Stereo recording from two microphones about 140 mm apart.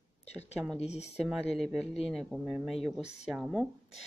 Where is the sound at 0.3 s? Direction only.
50° left (ahead or behind).